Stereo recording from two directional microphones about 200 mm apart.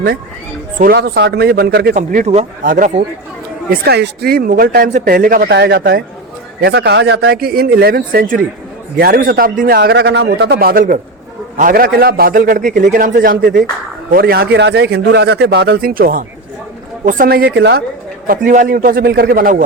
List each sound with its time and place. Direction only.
0.8 s speech: 50° right (ahead or behind)
3.7 s speech: 55° right (ahead or behind)
18.3 s speech: 45° right (ahead or behind)